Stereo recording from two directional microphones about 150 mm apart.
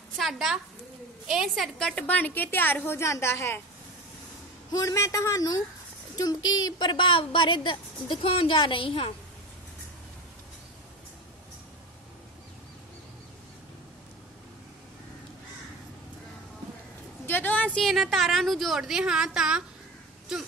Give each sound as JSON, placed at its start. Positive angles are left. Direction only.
{"t": 0.2, "sound": "a woman's voice", "side_deg": 0}
{"t": 4.7, "sound": "a man's voice", "side_deg": 20}
{"t": 17.3, "sound": "a sound", "side_deg": 10}
{"t": 17.7, "sound": "a woman's voice", "side_deg": 0}